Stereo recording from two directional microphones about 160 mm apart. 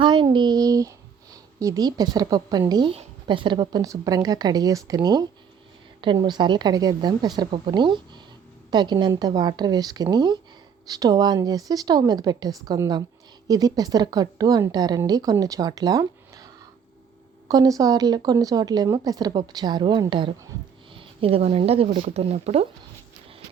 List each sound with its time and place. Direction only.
0.0 s a child's voice: 30° right (ahead or behind)
17.5 s a woman's voice: 25° right (ahead or behind); by 22.6 s 40° right (ahead or behind)